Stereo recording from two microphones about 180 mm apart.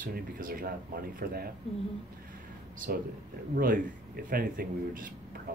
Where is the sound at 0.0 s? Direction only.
50° right (ahead or behind).